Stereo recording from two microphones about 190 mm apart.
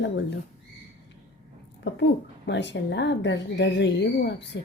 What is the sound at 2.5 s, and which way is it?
Speech, 70° left (ahead or behind).